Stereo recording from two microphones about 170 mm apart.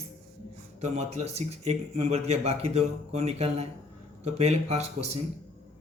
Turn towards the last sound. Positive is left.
turn(degrees=-40)  # may be behind; listen again after turning